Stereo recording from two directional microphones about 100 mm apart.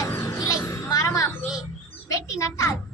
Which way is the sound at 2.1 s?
35° left (ahead or behind).